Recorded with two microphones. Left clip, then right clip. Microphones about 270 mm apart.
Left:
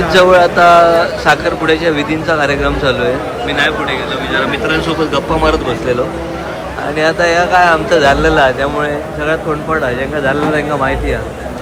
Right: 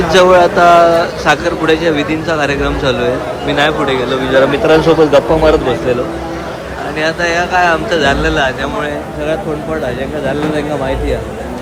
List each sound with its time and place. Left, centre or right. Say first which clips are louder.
0.1 s speech: even; centre
7.0 s speech: left 3 dB; centre